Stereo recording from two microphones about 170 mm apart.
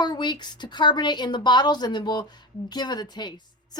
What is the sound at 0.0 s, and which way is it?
Speech, 25° left (ahead or behind).